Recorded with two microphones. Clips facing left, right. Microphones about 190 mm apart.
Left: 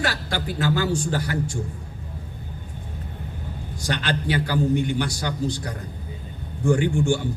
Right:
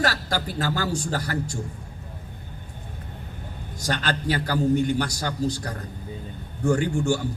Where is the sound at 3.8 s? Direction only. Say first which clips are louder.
Even; 40° right (ahead or behind).